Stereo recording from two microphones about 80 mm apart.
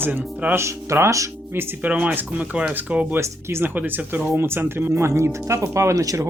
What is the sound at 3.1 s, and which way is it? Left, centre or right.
Speech, right.